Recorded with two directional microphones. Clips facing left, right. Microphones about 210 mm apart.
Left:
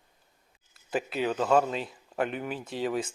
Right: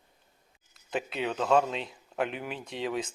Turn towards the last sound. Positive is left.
turn(degrees=0)  # may be behind; listen again after turning